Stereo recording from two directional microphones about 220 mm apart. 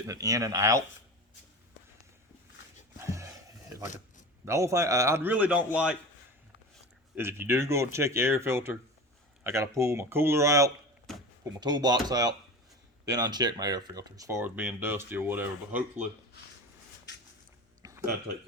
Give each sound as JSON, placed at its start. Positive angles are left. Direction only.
{"t": 0.1, "sound": "speech", "side_deg": -15}
{"t": 3.0, "sound": "a sound", "side_deg": -15}
{"t": 4.4, "sound": "speech", "side_deg": -15}
{"t": 7.2, "sound": "speech", "side_deg": -10}
{"t": 11.1, "sound": "door", "side_deg": 0}
{"t": 11.6, "sound": "speech", "side_deg": -20}
{"t": 17.8, "sound": "a sound", "side_deg": -15}